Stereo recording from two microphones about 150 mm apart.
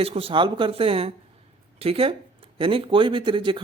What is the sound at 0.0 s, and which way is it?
Speech, 40° right (ahead or behind).